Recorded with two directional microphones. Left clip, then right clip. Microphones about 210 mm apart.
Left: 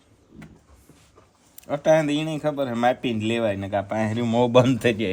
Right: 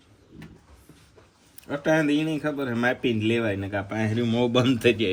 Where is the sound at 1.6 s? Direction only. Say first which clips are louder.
Left 4 dB; 40° left (ahead or behind).